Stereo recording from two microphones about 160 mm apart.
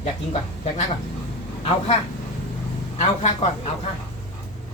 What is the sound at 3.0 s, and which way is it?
Speech, 40° left (ahead or behind).